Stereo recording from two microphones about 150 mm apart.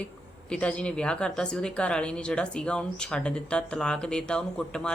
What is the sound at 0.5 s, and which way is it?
A woman's voice, 10° left (ahead or behind).